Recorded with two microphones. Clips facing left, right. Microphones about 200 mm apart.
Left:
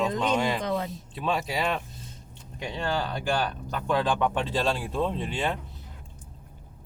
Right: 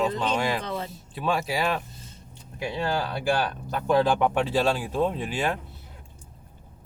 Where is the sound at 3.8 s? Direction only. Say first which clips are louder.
Right 4 dB; 10° right (ahead or behind).